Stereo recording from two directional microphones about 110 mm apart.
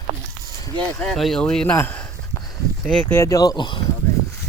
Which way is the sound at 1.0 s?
5° left (ahead or behind).